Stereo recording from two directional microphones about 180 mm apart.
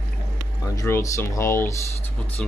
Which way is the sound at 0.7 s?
15° left (ahead or behind).